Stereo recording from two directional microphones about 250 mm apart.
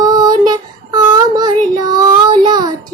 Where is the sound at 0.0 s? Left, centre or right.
Centre.